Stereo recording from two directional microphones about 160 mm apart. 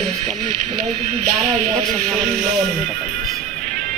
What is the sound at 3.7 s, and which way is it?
Music, 65° right (ahead or behind).